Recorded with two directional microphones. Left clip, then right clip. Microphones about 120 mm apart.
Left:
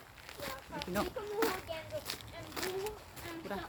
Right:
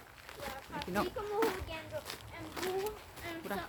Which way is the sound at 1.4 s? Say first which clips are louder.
Right 1 dB; 70° left (ahead or behind).